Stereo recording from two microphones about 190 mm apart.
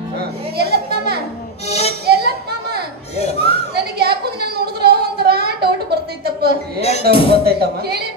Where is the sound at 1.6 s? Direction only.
35° left (ahead or behind).